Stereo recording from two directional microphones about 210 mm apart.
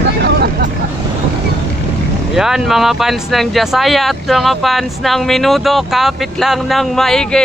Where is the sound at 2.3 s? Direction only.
Centre (ahead or behind).